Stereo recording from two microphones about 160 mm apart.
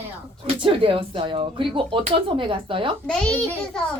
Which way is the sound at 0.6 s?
35° right (ahead or behind).